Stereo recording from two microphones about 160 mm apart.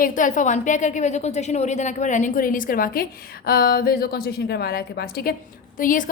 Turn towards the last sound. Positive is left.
turn(degrees=55)  # may be behind; listen again after turning